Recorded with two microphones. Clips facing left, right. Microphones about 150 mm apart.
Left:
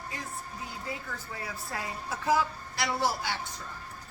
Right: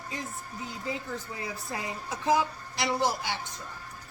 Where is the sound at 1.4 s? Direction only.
20° right (ahead or behind).